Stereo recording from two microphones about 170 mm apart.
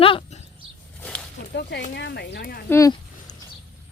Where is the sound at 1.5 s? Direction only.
80° left.